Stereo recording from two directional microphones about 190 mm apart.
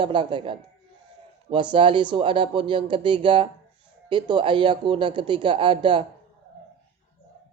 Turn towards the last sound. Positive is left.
turn(degrees=-25)  # may be behind; listen again after turning